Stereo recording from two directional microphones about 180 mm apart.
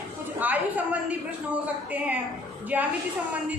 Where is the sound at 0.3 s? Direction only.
10° right (ahead or behind).